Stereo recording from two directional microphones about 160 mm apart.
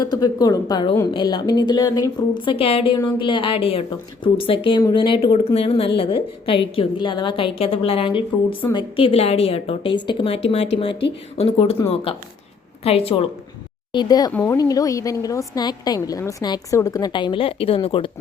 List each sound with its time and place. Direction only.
0.0 s a woman's voice: 25° left (ahead or behind)
13.9 s a woman's voice: 25° left (ahead or behind)